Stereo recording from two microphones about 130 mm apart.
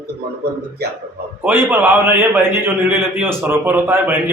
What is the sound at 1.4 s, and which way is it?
A man's voice, 15° right (ahead or behind).